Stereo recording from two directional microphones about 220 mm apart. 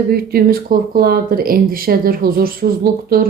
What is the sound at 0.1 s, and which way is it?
Speech, 45° right (ahead or behind).